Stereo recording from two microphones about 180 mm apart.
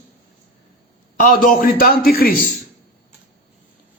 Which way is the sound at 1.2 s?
50° left (ahead or behind).